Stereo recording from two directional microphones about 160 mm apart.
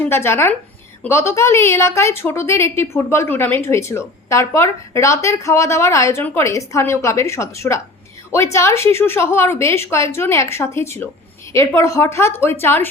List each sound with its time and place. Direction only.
0.0 s a woman's voice: 15° left (ahead or behind)